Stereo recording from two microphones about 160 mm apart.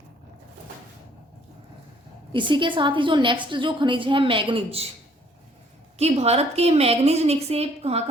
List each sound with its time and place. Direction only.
2.3 s a woman's voice: 30° right (ahead or behind)
6.0 s a woman's voice: 40° right (ahead or behind)